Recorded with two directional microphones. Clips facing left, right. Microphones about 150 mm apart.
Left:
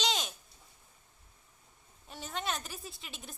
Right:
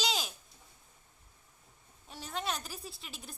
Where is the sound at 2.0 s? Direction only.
Centre (ahead or behind).